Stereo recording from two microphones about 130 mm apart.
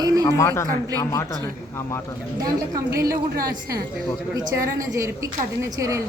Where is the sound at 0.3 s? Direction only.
25° left (ahead or behind).